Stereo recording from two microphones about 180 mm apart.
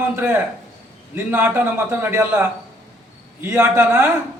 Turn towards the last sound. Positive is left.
turn(degrees=-15)  # may be behind; listen again after turning